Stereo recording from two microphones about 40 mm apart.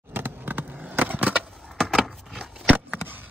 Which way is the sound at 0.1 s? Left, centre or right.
Right.